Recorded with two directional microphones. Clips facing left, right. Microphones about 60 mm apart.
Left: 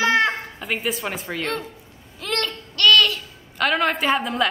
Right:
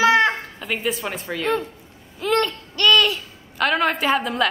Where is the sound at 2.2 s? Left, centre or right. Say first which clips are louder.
Right 6 dB; centre.